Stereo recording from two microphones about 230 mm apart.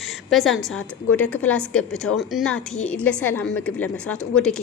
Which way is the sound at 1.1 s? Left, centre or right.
Centre.